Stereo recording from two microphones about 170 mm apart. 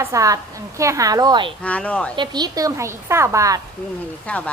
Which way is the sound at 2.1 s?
25° right (ahead or behind).